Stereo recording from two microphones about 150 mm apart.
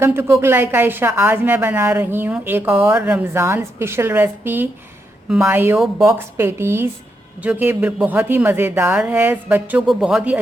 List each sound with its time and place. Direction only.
0.0 s speech: 15° right (ahead or behind)